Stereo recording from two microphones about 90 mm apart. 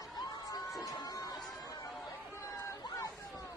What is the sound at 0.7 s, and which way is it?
Crowd, 40° left (ahead or behind).